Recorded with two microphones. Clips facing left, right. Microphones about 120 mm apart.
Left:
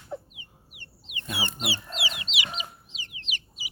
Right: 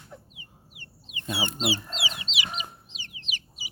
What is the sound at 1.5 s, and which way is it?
Speech, 25° right (ahead or behind).